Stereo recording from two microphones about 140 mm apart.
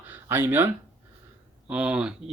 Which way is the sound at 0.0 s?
15° right (ahead or behind).